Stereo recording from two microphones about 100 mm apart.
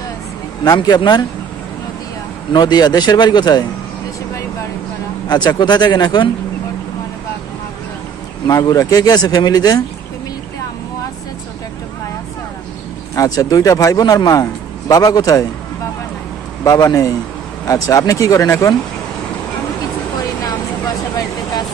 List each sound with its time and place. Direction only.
0.7 s speech: 45° left (ahead or behind)
2.5 s speech: 45° left (ahead or behind)
5.3 s speech: 45° left (ahead or behind)
8.5 s a man's voice: 35° left (ahead or behind)
13.1 s a man's voice: 35° left (ahead or behind)
16.6 s a man's voice: 35° left (ahead or behind)